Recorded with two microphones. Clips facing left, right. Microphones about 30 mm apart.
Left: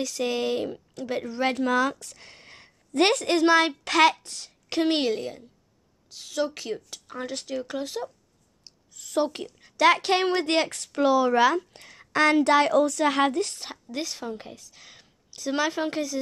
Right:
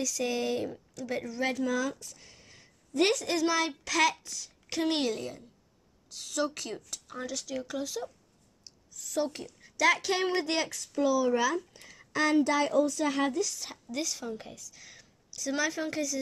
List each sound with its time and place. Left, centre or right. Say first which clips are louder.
0.0 s a woman's voice: left 4 dB; left
1.6 s a woman's voice: left 7 dB; left
7.2 s a woman's voice: left 4 dB; left
8.6 s a sound: even; left
9.5 s speech: left 6 dB; left
13.9 s a woman's voice: left 2 dB; left